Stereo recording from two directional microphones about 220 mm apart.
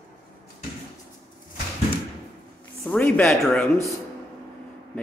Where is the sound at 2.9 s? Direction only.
5° left (ahead or behind).